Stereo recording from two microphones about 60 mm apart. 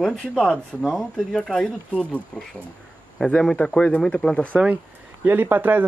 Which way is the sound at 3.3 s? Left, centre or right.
Centre.